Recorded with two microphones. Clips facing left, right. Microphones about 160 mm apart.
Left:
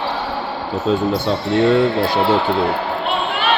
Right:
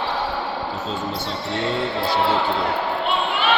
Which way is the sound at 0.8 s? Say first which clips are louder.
Left 10 dB; 60° left (ahead or behind).